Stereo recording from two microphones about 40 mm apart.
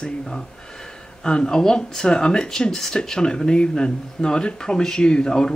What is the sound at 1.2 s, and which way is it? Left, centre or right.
Speech, centre.